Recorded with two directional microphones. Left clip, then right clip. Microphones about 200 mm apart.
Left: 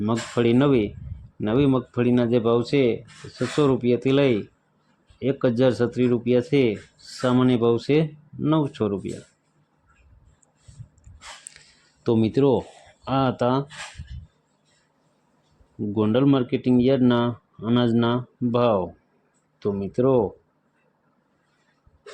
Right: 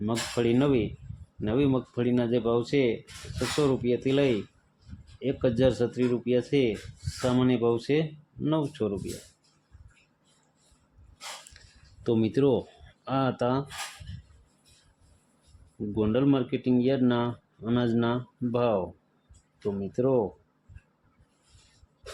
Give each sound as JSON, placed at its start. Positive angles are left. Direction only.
{"t": 0.1, "sound": "speech", "side_deg": 30}
{"t": 11.6, "sound": "a sound", "side_deg": 30}
{"t": 12.0, "sound": "speech", "side_deg": 15}
{"t": 16.0, "sound": "speech", "side_deg": 25}